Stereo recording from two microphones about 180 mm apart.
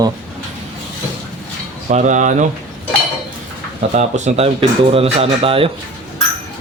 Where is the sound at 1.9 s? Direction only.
40° right (ahead or behind).